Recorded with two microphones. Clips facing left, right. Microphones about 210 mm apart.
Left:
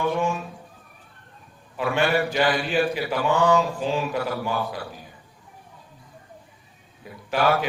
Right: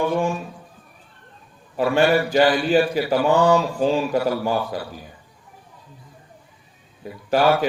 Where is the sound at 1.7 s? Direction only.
40° right (ahead or behind).